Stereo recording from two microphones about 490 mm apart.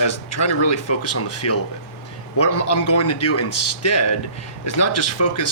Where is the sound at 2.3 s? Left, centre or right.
Left.